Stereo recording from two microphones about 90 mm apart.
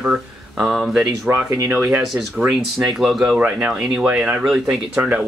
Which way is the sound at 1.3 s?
30° right (ahead or behind).